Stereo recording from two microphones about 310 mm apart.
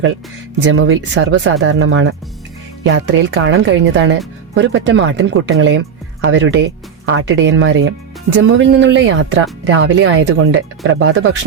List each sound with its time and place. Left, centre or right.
0.6 s speech: right